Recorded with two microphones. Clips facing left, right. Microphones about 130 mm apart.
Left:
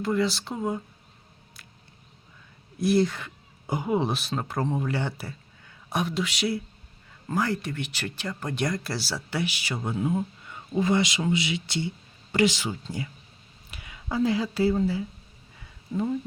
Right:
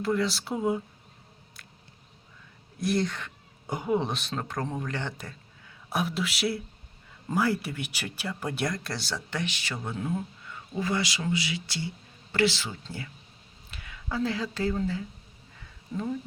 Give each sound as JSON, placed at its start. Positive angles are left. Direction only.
{"t": 0.0, "sound": "speech", "side_deg": 0}
{"t": 2.7, "sound": "speech", "side_deg": 0}